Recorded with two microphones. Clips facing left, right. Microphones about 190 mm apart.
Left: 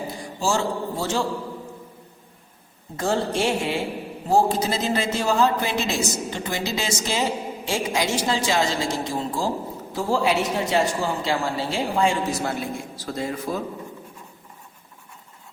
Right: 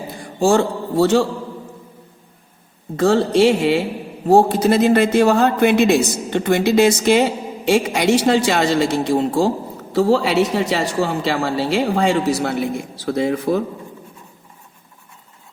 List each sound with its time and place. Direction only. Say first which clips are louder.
0.2 s a man's voice: right 9 dB; 55° right (ahead or behind)
2.9 s a woman's voice: right 9 dB; 70° right (ahead or behind)